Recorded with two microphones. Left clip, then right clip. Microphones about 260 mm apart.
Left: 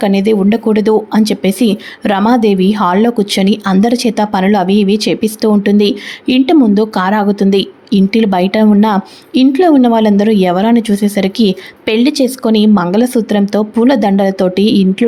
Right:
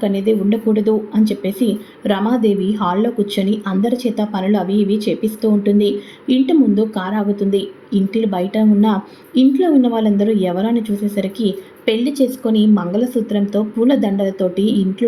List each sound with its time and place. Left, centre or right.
0.0 s speech: left